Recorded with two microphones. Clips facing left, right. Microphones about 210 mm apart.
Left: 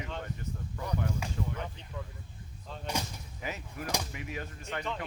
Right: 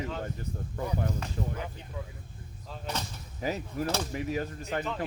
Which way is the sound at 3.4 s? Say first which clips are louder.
Right 8 dB; 35° right (ahead or behind).